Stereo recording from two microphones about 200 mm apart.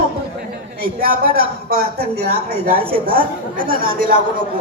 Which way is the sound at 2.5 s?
30° right (ahead or behind).